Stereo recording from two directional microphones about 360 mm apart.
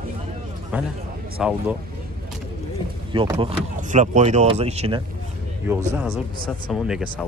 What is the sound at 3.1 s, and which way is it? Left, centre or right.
Speech, centre.